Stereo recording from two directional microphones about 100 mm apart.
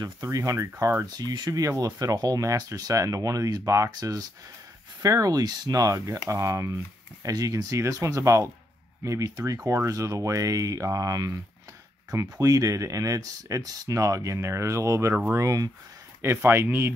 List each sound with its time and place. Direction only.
0.0 s speech: 35° right (ahead or behind)
1.0 s speech: 45° right (ahead or behind)
16.3 s speech: 20° right (ahead or behind)